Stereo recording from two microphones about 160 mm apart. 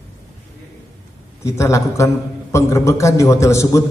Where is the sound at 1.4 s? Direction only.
20° left (ahead or behind).